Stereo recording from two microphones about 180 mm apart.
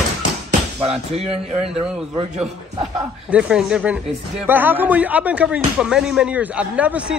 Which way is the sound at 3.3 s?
5° right (ahead or behind).